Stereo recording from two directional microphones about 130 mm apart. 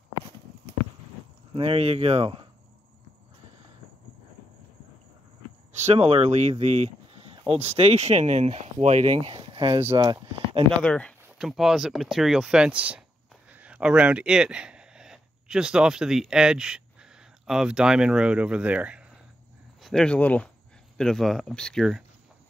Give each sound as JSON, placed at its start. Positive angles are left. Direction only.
{"t": 1.5, "sound": "speech", "side_deg": -45}
{"t": 5.9, "sound": "speech", "side_deg": -50}
{"t": 9.4, "sound": "speech", "side_deg": -35}
{"t": 9.8, "sound": "speech", "side_deg": -30}
{"t": 10.8, "sound": "speech", "side_deg": 10}
{"t": 11.3, "sound": "speech", "side_deg": 0}
{"t": 19.8, "sound": "speech", "side_deg": 5}